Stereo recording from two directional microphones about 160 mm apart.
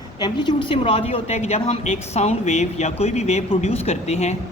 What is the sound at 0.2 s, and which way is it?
Speech, 25° left (ahead or behind).